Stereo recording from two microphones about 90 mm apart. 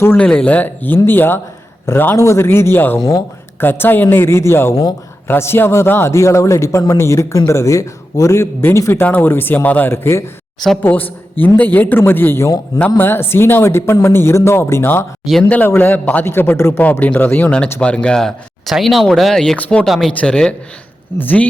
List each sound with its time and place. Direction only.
0.2 s speech: 10° left (ahead or behind)
2.1 s speech: 35° left (ahead or behind)
4.7 s speech: 45° left (ahead or behind)
5.3 s a man's voice: 25° left (ahead or behind); by 19.5 s 5° left (ahead or behind)
19.5 s speech: 15° left (ahead or behind)
19.8 s speech: centre (ahead or behind); by 21.4 s 20° left (ahead or behind)